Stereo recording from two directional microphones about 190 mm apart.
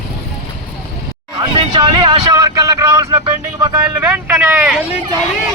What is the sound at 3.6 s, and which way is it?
Speech, 20° right (ahead or behind).